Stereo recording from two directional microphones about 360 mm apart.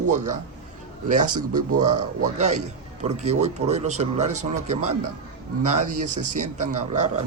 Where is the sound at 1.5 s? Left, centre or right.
Right.